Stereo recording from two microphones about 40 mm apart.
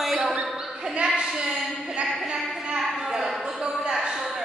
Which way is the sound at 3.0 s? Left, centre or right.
Centre.